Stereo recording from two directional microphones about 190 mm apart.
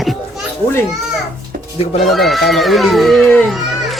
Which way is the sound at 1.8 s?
35° left (ahead or behind).